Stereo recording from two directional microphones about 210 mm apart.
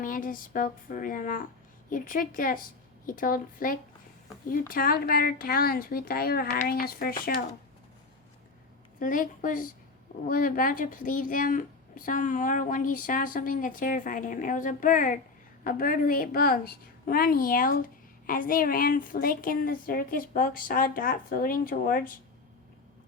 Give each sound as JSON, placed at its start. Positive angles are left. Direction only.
{"t": 0.0, "sound": "a woman's voice", "side_deg": 40}
{"t": 9.0, "sound": "a woman's voice", "side_deg": 40}